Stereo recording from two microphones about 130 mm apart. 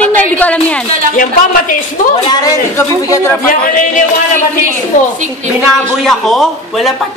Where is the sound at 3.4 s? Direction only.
90° left.